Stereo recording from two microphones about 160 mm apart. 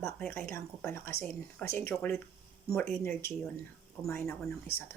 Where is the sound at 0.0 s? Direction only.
15° left (ahead or behind).